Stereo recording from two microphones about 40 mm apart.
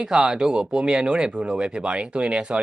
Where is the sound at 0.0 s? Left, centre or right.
Centre.